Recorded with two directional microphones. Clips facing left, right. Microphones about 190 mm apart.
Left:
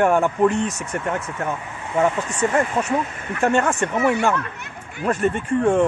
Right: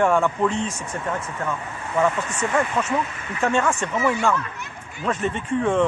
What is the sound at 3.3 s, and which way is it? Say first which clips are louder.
Speech: left 3 dB; 55° left (ahead or behind).